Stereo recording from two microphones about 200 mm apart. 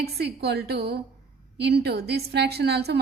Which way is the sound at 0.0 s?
55° right (ahead or behind).